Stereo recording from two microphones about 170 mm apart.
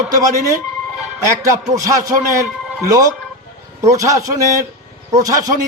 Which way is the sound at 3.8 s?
20° right (ahead or behind).